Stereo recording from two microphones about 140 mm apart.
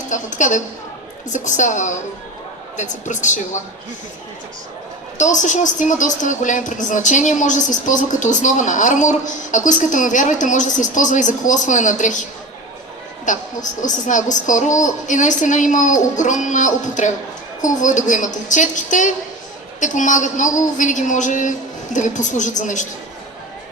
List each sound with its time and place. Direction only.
0.1 s a woman's voice: 65° left (ahead or behind)
5.1 s a woman's voice: 60° left (ahead or behind)
13.2 s a woman's voice: 65° left (ahead or behind)